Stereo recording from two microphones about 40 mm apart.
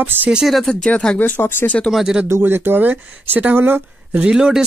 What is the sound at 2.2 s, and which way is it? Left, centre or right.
Speech, right.